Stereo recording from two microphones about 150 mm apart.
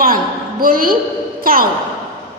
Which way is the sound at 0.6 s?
70° right (ahead or behind).